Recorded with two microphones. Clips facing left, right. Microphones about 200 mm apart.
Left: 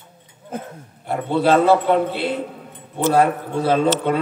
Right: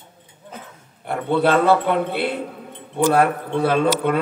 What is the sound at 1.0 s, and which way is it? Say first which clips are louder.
A man's voice: even; 60° right (ahead or behind).